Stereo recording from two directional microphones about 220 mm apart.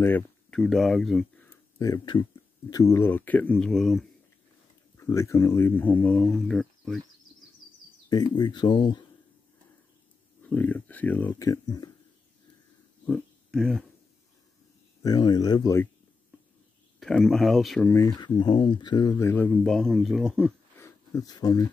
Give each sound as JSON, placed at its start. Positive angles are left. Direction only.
{"t": 0.0, "sound": "speech", "side_deg": 5}
{"t": 4.9, "sound": "speech", "side_deg": 15}
{"t": 8.1, "sound": "speech", "side_deg": 20}
{"t": 10.5, "sound": "speech", "side_deg": 5}
{"t": 13.0, "sound": "a sound", "side_deg": 5}
{"t": 15.0, "sound": "speech", "side_deg": 20}
{"t": 17.0, "sound": "speech", "side_deg": 0}
{"t": 17.9, "sound": "speech", "side_deg": 15}